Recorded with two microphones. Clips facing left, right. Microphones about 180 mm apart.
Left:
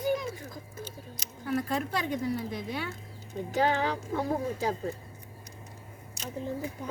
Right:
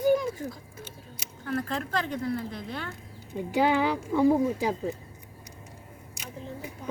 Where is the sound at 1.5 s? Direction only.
10° left (ahead or behind).